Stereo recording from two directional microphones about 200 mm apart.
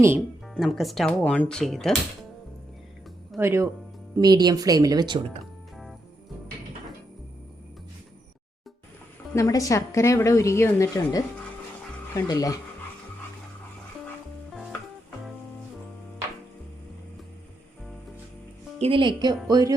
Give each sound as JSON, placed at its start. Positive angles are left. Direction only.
{"t": 0.2, "sound": "speech", "side_deg": 0}
{"t": 3.3, "sound": "speech", "side_deg": -10}
{"t": 9.3, "sound": "speech", "side_deg": 15}
{"t": 14.5, "sound": "music", "side_deg": 0}
{"t": 18.8, "sound": "speech", "side_deg": -25}